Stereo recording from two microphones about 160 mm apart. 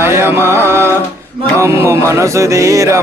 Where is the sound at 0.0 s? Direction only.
15° right (ahead or behind).